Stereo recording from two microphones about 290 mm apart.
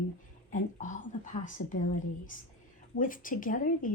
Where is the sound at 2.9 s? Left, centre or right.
Left.